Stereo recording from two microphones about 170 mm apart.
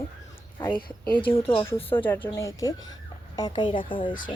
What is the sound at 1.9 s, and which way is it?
A woman's voice, 10° left (ahead or behind).